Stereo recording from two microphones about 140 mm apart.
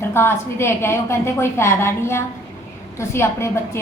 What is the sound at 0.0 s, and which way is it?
A woman's voice, 15° left (ahead or behind).